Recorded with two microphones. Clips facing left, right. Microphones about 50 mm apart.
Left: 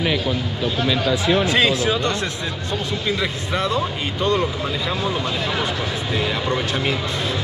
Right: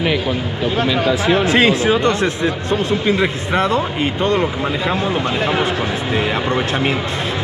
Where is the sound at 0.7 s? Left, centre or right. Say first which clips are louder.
Right 4 dB; right.